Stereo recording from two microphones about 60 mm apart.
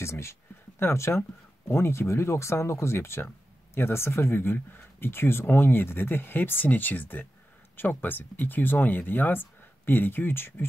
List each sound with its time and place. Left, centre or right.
0.0 s speech: left